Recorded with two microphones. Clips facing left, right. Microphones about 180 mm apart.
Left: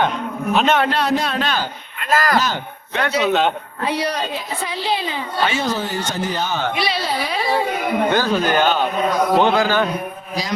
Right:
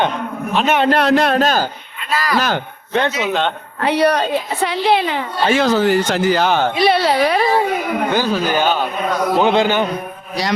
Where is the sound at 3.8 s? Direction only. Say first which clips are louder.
Right 9 dB; 65° right (ahead or behind).